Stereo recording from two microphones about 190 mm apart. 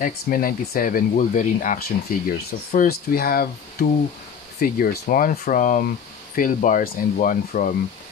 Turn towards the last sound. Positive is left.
turn(degrees=45)  # may be behind; listen again after turning